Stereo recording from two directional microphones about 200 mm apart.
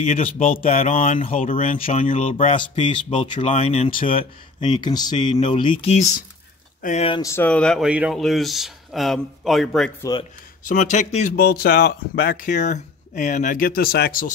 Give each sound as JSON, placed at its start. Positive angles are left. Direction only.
{"t": 0.0, "sound": "speech", "side_deg": 35}
{"t": 7.1, "sound": "speech", "side_deg": 15}
{"t": 10.6, "sound": "speech", "side_deg": 40}
{"t": 11.3, "sound": "speech", "side_deg": 50}